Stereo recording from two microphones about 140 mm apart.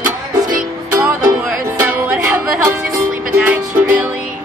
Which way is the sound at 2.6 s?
20° right (ahead or behind).